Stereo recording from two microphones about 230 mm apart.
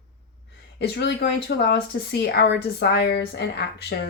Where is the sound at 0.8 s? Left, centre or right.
Left.